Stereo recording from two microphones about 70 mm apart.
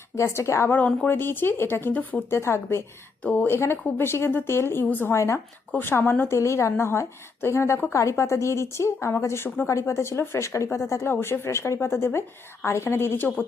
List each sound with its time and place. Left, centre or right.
0.2 s a woman's voice: left
0.7 s a woman's voice: left
2.3 s a woman's voice: left
5.1 s a woman's voice: left